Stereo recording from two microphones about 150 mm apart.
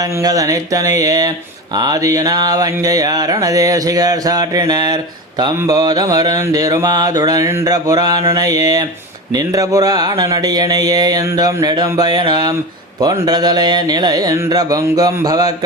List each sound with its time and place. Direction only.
0.0 s mantra: 25° right (ahead or behind)